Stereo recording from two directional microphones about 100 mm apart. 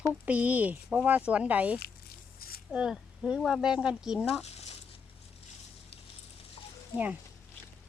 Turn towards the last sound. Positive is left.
turn(degrees=-15)  # may be behind; listen again after turning